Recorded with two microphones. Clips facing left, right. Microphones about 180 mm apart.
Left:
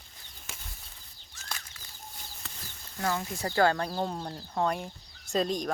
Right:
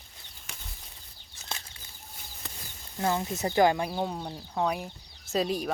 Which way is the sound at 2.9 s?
20° right (ahead or behind).